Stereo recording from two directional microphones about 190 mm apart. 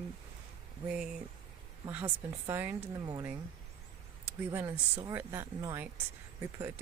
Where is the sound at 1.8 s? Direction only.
10° right (ahead or behind).